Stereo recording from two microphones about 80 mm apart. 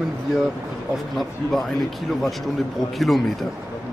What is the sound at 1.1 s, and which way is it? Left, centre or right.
Speech, centre.